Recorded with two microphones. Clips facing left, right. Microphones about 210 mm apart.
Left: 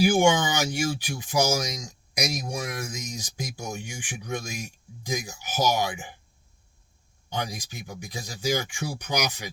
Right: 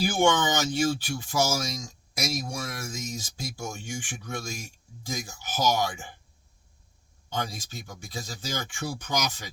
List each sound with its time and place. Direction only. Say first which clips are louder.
0.0 s speech: left 3 dB; 15° left (ahead or behind)
7.3 s speech: left 1 dB; 15° left (ahead or behind)